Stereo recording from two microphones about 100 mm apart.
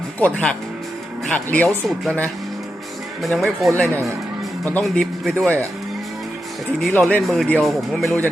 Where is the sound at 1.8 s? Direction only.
Centre (ahead or behind).